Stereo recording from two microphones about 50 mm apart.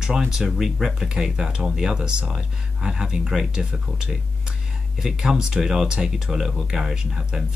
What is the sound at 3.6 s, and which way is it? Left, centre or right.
Speech, centre.